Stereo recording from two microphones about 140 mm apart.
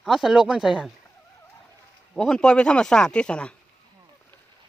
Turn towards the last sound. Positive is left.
turn(degrees=5)  # may be behind; listen again after turning